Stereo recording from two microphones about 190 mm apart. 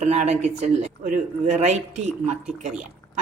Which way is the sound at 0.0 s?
35° right (ahead or behind).